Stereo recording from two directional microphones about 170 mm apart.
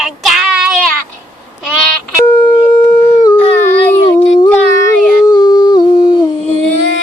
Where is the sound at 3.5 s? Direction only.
10° left (ahead or behind).